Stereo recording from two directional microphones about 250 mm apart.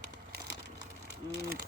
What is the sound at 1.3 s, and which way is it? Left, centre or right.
Speech, right.